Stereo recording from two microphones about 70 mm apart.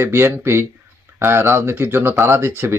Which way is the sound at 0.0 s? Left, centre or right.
Right.